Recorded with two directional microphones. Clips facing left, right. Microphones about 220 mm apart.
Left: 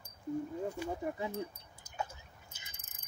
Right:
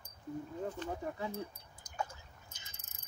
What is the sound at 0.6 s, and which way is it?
Speech, 10° left (ahead or behind).